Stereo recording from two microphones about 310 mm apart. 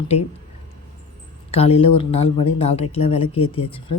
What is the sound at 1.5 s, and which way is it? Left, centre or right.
Speech, centre.